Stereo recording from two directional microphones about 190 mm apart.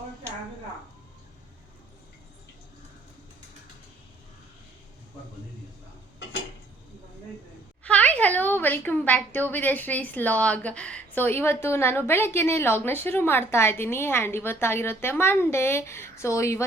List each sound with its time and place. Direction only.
7.9 s a woman's voice: 5° left (ahead or behind)